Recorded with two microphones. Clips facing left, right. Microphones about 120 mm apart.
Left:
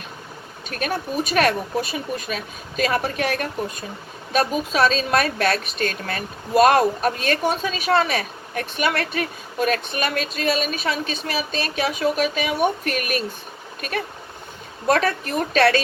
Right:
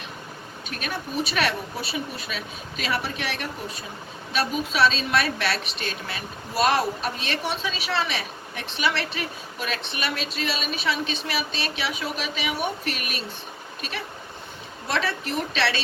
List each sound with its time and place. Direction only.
0.7 s a woman's voice: 45° left (ahead or behind)
14.8 s a woman's voice: 50° left (ahead or behind)